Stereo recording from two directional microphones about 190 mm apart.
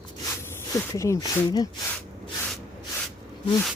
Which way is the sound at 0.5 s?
15° left (ahead or behind).